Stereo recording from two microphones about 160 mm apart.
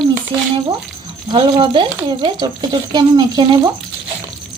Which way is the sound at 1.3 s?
30° right (ahead or behind).